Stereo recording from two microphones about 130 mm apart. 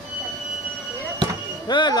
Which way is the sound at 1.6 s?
35° left (ahead or behind).